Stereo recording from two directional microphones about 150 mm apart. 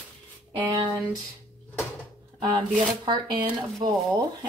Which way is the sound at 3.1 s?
30° right (ahead or behind).